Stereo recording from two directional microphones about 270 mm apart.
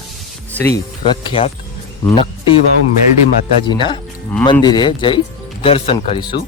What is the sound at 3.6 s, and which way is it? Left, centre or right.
A man's voice, centre.